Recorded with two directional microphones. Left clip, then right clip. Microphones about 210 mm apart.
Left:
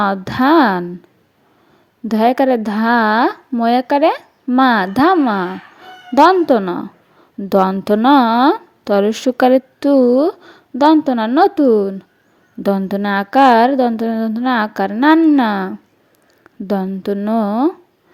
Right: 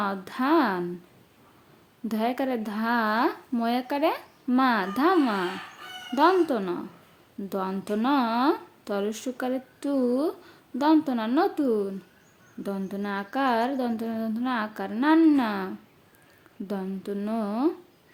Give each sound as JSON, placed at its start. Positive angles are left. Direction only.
{"t": 0.0, "sound": "a woman's voice", "side_deg": 35}
{"t": 2.0, "sound": "a woman's voice", "side_deg": 35}